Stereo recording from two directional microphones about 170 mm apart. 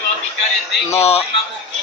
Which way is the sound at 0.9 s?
40° left (ahead or behind).